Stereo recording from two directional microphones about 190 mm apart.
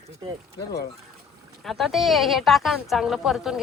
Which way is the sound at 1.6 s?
Centre (ahead or behind).